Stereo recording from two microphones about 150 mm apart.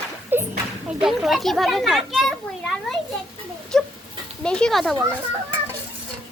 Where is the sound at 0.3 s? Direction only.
15° right (ahead or behind).